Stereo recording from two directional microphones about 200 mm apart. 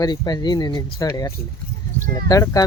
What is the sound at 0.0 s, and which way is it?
Speech, 20° left (ahead or behind).